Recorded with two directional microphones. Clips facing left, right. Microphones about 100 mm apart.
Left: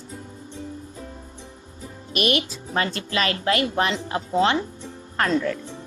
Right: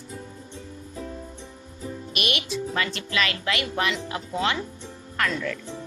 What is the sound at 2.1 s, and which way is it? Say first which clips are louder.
Speech: left 6 dB; 40° left (ahead or behind).